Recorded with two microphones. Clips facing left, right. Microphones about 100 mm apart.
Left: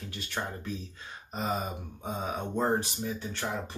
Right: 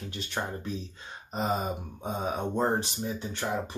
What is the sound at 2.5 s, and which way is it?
Speech, 25° right (ahead or behind).